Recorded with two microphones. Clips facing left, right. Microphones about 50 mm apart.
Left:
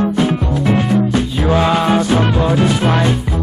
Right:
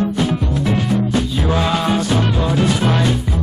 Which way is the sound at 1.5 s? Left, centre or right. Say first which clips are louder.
Left 6 dB; left.